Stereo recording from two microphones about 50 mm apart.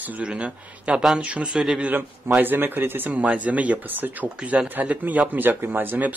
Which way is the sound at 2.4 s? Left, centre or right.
Right.